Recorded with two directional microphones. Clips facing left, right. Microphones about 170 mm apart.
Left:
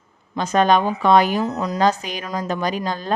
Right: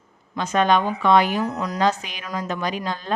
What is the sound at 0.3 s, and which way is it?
Speech, 40° left (ahead or behind).